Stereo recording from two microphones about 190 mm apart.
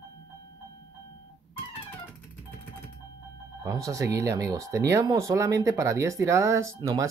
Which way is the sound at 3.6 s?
15° right (ahead or behind).